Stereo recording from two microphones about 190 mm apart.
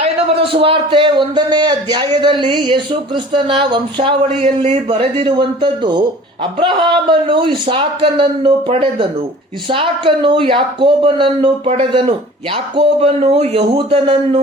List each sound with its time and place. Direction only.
0.0 s speech: 30° right (ahead or behind)